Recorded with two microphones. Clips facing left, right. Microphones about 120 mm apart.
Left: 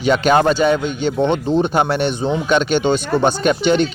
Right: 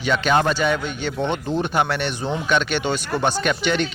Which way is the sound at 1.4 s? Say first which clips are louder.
Left 5 dB; 30° left (ahead or behind).